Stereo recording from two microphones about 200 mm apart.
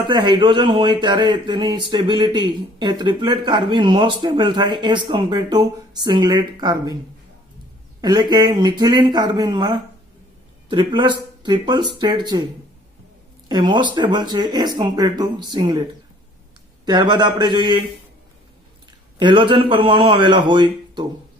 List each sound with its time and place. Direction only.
0.0 s speech: 25° right (ahead or behind)
8.0 s speech: 20° right (ahead or behind)
13.5 s speech: 20° right (ahead or behind)
16.8 s speech: 20° right (ahead or behind)
19.1 s speech: 25° right (ahead or behind)